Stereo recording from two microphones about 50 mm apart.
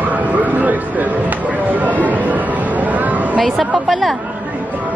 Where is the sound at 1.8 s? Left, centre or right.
Right.